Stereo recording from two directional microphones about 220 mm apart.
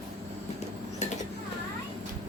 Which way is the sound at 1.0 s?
30° left (ahead or behind).